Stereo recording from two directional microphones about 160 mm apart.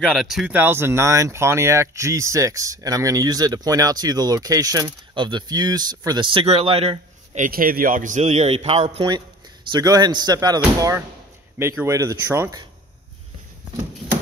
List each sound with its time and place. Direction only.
0.0 s speech: centre (ahead or behind)
0.6 s speech: 15° right (ahead or behind); by 7.4 s 40° right (ahead or behind)
7.4 s a man's voice: 65° right (ahead or behind); by 9.0 s 40° right (ahead or behind)
9.7 s speech: 25° right (ahead or behind)
11.5 s speech: 15° right (ahead or behind)